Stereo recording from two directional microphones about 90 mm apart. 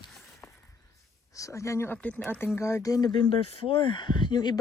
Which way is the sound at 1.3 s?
35° left (ahead or behind).